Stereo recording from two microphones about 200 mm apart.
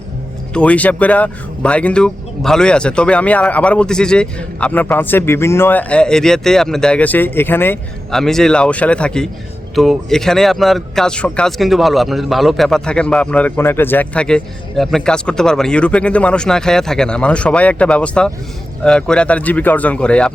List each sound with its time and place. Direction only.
0.5 s speech: 5° left (ahead or behind)